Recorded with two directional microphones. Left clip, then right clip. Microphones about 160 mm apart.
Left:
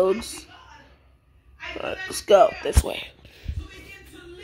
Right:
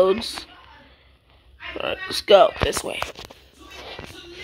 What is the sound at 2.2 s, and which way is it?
Speech, centre (ahead or behind).